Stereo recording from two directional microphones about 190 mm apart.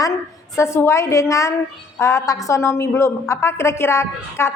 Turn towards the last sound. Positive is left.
turn(degrees=15)  # may be behind; listen again after turning